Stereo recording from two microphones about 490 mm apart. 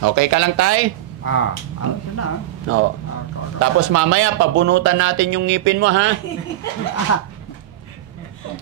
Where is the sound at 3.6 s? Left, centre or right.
Right.